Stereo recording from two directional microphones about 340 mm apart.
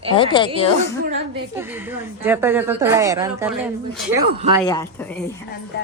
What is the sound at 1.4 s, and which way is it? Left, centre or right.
A woman's voice, centre.